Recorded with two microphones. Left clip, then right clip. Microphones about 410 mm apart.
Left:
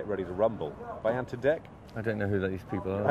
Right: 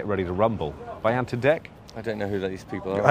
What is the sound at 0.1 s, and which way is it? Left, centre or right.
Speech, right.